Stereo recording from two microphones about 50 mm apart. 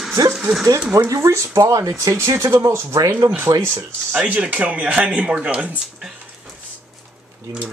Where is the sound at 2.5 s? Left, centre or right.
Right.